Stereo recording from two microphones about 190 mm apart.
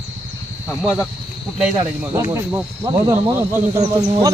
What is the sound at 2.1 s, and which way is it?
Speech, 15° right (ahead or behind).